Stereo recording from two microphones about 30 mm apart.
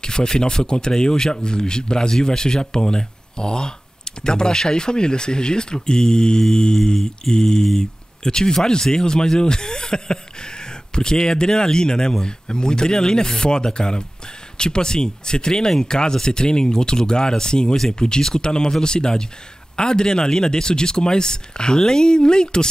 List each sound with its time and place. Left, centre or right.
0.0 s speech: left